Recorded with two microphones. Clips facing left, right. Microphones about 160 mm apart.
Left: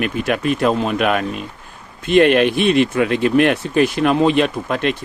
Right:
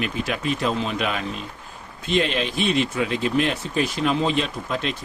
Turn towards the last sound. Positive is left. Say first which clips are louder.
# left 7 dB
turn(degrees=65)  # may be behind; listen again after turning